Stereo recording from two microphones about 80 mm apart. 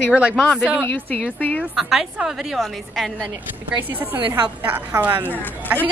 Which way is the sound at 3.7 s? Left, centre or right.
Right.